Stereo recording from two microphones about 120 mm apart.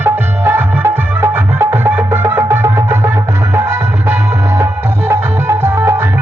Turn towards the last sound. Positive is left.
turn(degrees=-25)  # may be behind; listen again after turning